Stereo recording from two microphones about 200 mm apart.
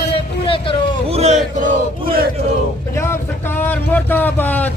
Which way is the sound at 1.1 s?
35° right (ahead or behind).